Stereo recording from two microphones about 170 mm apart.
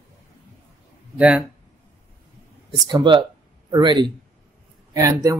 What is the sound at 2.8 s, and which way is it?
Speech, 25° right (ahead or behind).